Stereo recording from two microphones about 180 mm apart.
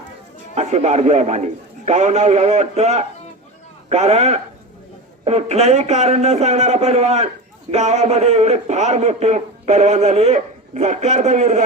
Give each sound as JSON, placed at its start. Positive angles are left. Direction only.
{"t": 0.5, "sound": "a man's voice", "side_deg": -40}